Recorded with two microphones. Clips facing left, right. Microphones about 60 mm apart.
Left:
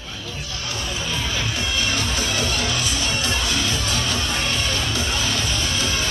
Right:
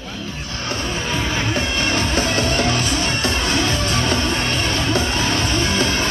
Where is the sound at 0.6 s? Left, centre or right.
Right.